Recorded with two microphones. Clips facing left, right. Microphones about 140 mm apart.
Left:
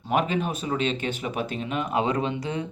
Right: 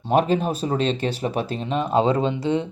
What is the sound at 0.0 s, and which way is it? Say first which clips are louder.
Speech: right 5 dB; 35° right (ahead or behind).